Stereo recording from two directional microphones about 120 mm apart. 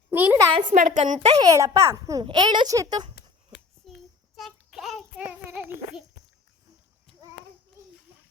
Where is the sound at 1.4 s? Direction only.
25° right (ahead or behind).